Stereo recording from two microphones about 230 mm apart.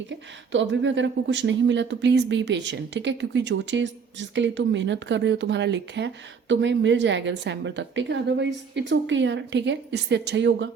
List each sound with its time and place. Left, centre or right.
0.5 s speech: right